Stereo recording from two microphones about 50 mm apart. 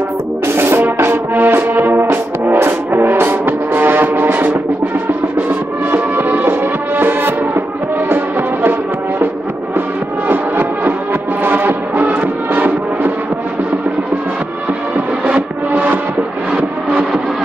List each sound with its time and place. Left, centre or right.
0.6 s music: right
9.8 s music: right
15.2 s music: right
16.5 s music: centre